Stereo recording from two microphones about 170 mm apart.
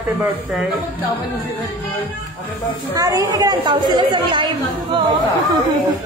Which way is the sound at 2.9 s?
20° right (ahead or behind).